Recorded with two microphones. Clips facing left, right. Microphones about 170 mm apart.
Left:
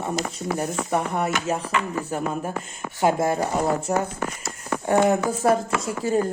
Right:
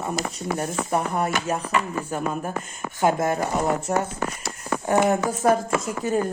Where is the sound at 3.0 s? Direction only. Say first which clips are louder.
Left 1 dB; 25° left (ahead or behind).